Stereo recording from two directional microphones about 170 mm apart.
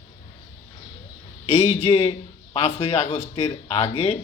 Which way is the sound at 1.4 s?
35° left (ahead or behind).